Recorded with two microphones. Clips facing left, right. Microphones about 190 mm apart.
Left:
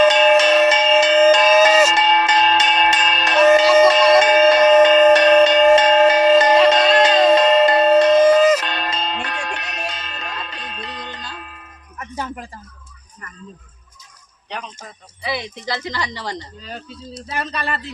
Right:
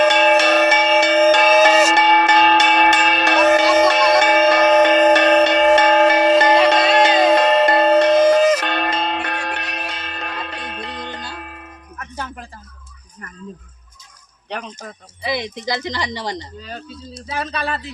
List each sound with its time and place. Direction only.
0.0 s music: 60° right (ahead or behind)
11.9 s music: 10° left (ahead or behind)
14.5 s a sound: 60° right (ahead or behind)
15.2 s speech: 15° right (ahead or behind)
17.2 s speech: 5° right (ahead or behind)